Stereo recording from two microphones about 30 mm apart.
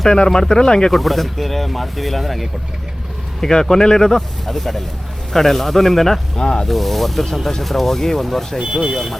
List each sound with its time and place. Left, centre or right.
0.0 s speech: left
0.9 s speech: centre
3.4 s speech: centre
6.3 s speech: left
6.7 s speech: centre
8.6 s speech: centre
8.9 s speech: centre